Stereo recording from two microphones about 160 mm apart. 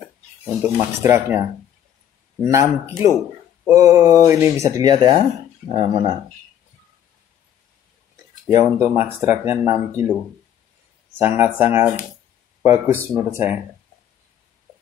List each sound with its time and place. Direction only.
0.6 s speech: 15° right (ahead or behind)
2.4 s speech: 15° right (ahead or behind)
4.8 s speech: 30° right (ahead or behind)
8.5 s speech: 20° right (ahead or behind)
11.1 s speech: 15° right (ahead or behind)